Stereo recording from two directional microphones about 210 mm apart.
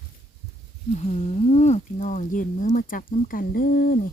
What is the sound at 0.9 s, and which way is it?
Speech, 30° left (ahead or behind).